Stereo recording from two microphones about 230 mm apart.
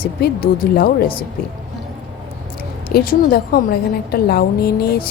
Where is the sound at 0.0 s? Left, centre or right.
Left.